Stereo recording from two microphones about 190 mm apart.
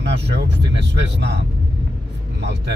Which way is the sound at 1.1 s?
65° right (ahead or behind).